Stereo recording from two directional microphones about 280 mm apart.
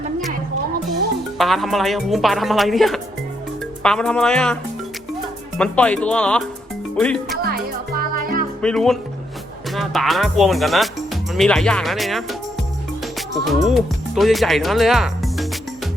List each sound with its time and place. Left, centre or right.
1.4 s speech: centre
5.5 s speech: centre
7.9 s music: right
8.6 s speech: centre
13.4 s speech: centre